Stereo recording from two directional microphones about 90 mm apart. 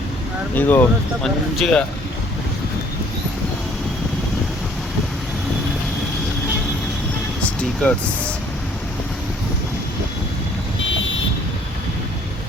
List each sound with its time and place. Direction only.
0.5 s speech: 20° left (ahead or behind)
1.2 s speech: 5° left (ahead or behind)
7.4 s speech: 15° left (ahead or behind)